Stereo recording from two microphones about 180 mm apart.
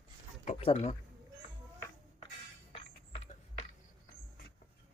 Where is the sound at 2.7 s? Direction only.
35° left (ahead or behind).